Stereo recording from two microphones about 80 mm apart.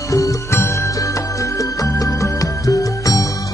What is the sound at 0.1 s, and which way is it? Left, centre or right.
Music, left.